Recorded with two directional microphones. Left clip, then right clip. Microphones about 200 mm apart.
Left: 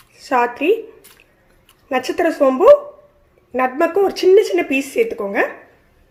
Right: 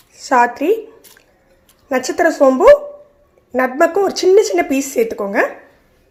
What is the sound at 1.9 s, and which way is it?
A woman's voice, 10° right (ahead or behind).